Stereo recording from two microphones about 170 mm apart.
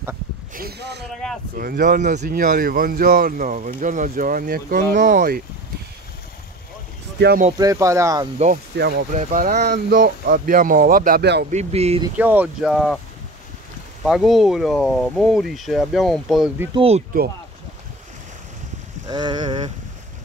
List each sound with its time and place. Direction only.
0.6 s speech: 70° right (ahead or behind)
1.2 s speech: 5° left (ahead or behind)
1.6 s speech: 55° right (ahead or behind)
7.5 s speech: 20° right (ahead or behind)
8.7 s speech: 75° right (ahead or behind)
9.1 s speech: 50° right (ahead or behind)
9.8 s speech: 60° right (ahead or behind)
11.5 s speech: 40° right (ahead or behind)
12.2 s speech: 10° right (ahead or behind)
14.0 s speech: centre (ahead or behind)
16.7 s speech: 35° right (ahead or behind)
19.0 s speech: 25° right (ahead or behind)